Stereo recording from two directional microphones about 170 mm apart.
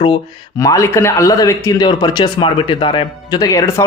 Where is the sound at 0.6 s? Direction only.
20° left (ahead or behind).